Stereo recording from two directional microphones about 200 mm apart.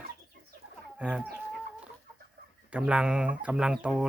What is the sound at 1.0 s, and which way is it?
Speech, 5° right (ahead or behind).